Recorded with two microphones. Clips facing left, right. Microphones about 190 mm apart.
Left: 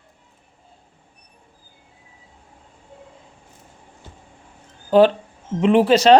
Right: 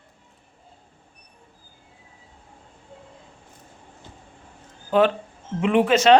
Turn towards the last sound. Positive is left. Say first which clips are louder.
# left 3 dB
turn(degrees=35)  # may be behind; listen again after turning